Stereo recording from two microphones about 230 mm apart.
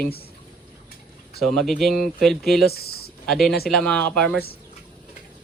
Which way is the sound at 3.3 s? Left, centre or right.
Centre.